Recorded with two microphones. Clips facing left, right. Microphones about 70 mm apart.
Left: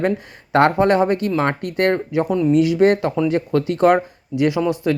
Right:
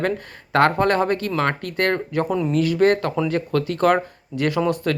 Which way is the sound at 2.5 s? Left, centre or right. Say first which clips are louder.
Left 3 dB; centre.